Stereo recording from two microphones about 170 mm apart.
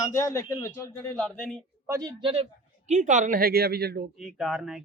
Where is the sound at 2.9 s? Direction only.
45° right (ahead or behind); by 4.1 s 65° right (ahead or behind).